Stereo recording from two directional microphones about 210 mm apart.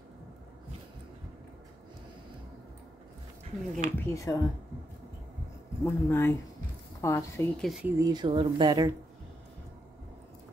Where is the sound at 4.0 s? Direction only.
15° left (ahead or behind).